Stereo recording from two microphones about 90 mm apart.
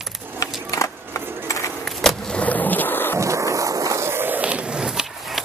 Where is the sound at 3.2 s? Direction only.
35° right (ahead or behind).